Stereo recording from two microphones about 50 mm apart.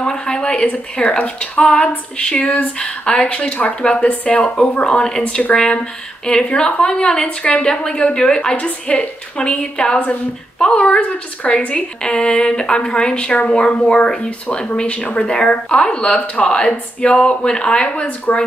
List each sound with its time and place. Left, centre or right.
0.0 s a sound: centre
0.9 s a woman's voice: left
7.2 s a woman's voice: left